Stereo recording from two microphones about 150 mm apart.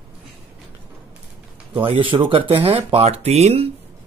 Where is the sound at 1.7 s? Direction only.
35° right (ahead or behind).